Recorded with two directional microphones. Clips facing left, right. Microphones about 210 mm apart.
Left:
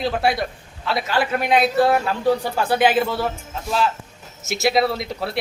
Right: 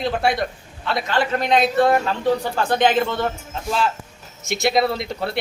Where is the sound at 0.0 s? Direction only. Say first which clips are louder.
Even; centre (ahead or behind).